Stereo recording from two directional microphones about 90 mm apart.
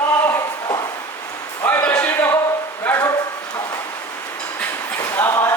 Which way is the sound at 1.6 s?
15° left (ahead or behind).